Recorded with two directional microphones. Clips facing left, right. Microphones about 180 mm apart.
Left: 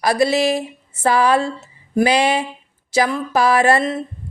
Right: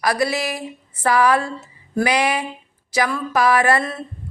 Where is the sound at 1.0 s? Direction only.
25° left (ahead or behind).